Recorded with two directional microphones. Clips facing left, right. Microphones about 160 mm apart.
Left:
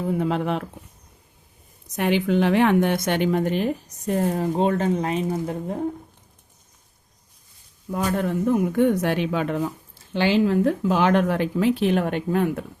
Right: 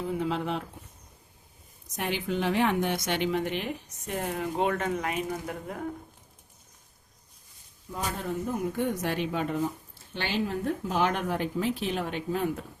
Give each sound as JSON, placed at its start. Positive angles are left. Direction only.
{"t": 0.0, "sound": "speech", "side_deg": 50}
{"t": 2.0, "sound": "speech", "side_deg": 70}
{"t": 7.9, "sound": "speech", "side_deg": 65}